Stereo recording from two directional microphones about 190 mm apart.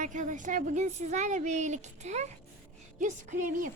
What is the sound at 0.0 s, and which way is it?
A woman's voice, 40° right (ahead or behind).